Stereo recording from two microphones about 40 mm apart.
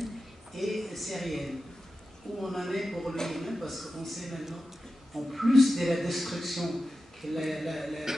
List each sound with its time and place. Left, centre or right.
0.6 s a man's voice: centre